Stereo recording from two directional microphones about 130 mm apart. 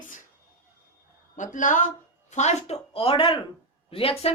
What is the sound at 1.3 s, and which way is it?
A woman's voice, 80° left.